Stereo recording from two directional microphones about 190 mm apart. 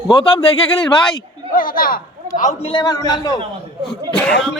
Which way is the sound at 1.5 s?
45° left (ahead or behind).